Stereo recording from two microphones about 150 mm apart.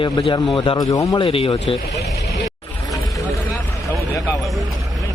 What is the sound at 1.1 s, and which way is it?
Speech, 40° left (ahead or behind).